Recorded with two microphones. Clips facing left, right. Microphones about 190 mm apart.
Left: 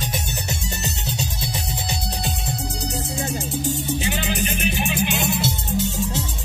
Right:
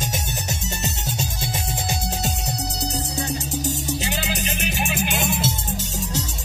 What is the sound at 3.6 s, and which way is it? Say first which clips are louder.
Music: left 2 dB; 40° right (ahead or behind).